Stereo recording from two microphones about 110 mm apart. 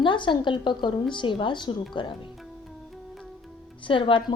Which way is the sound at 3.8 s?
50° left (ahead or behind).